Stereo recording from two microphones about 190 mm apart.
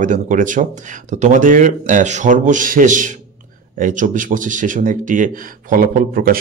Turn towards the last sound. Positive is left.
turn(degrees=-50)  # may be behind; listen again after turning